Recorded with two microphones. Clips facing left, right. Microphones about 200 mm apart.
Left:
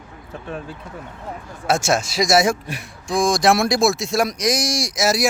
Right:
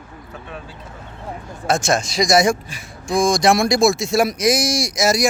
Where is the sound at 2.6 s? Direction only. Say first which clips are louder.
Left 6 dB; 65° left (ahead or behind).